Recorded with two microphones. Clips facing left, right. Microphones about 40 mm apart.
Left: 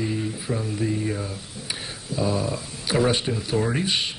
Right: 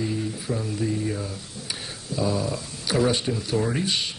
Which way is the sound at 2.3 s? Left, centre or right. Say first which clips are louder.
Left 1 dB; left.